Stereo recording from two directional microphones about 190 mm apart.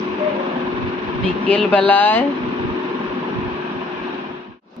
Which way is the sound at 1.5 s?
5° left (ahead or behind).